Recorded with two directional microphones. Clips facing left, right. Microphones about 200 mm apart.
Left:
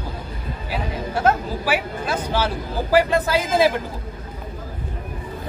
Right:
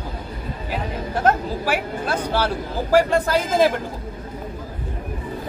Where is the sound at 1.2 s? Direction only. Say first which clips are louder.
Even; 5° left (ahead or behind).